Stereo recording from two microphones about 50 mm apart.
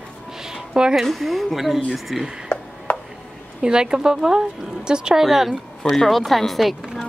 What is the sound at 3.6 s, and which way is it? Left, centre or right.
A woman's voice, centre.